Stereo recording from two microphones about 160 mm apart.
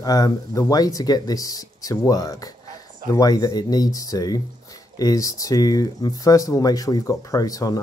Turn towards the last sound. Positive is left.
turn(degrees=20)  # may be behind; listen again after turning